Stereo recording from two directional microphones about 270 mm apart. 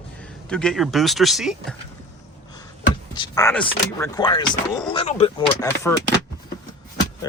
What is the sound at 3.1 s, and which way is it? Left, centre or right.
Speech, centre.